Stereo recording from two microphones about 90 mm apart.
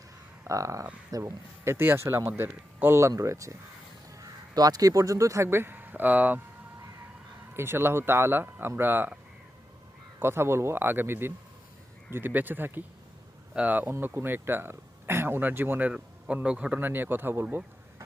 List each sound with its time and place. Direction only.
0.4 s speech: 35° right (ahead or behind); by 6.4 s 20° right (ahead or behind)
7.5 s speech: 25° right (ahead or behind)
10.2 s speech: 25° right (ahead or behind)
15.9 s a man's voice: 10° right (ahead or behind)